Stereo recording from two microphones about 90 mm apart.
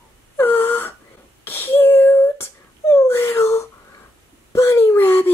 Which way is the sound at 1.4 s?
25° left (ahead or behind).